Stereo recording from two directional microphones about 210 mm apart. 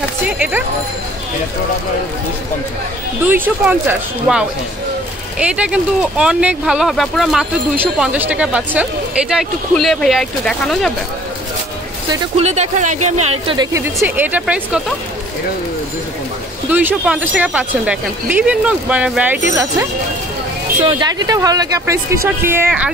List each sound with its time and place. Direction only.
0.4 s speech: 10° right (ahead or behind)
3.3 s speech: 10° right (ahead or behind)
12.1 s speech: 30° right (ahead or behind)
13.9 s speech: 10° right (ahead or behind)
16.7 s speech: 5° right (ahead or behind)